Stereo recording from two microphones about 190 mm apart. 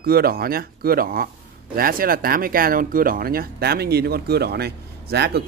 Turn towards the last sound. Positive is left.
turn(degrees=-60)  # may be behind; listen again after turning